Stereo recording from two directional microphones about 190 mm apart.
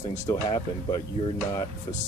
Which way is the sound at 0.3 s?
20° left (ahead or behind).